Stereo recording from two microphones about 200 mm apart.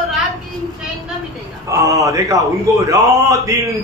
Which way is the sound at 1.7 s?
15° right (ahead or behind).